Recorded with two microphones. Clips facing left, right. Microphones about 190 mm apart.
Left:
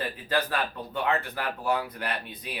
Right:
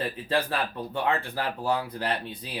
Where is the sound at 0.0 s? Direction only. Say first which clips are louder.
Right 1 dB; 30° right (ahead or behind).